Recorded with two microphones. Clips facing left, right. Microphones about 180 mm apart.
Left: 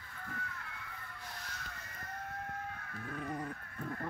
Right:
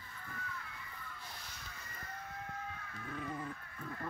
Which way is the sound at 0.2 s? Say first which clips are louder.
Left 2 dB; 65° left (ahead or behind).